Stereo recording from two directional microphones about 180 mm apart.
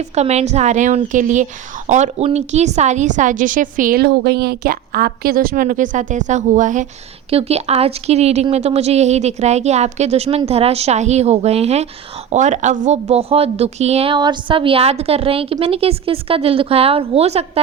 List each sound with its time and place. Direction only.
0.2 s a woman's voice: 35° right (ahead or behind)